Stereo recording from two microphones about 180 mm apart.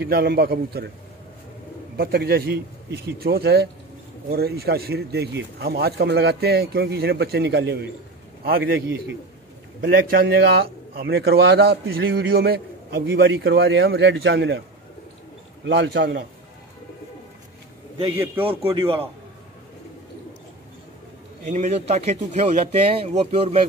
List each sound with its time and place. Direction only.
0.0 s a man's voice: 60° right (ahead or behind)
2.0 s a man's voice: 55° right (ahead or behind)
8.5 s a man's voice: 55° right (ahead or behind); by 14.6 s 85° right
15.6 s a man's voice: 85° right
18.1 s a man's voice: 10° right (ahead or behind)
18.5 s speech: 30° right (ahead or behind)
21.5 s speech: 40° right (ahead or behind)